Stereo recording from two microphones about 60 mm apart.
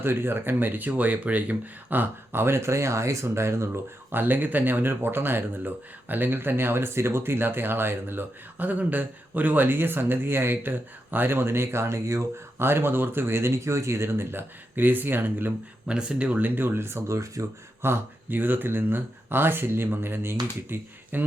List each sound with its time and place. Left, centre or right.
0.0 s speech: right
4.1 s speech: right
15.9 s speech: centre
16.6 s speech: right
17.4 s speech: right
17.8 s speech: right